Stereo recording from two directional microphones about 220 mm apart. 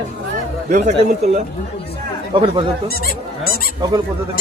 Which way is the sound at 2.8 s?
45° left (ahead or behind).